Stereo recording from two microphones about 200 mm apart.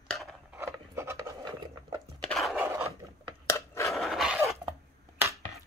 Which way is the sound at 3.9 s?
Centre (ahead or behind).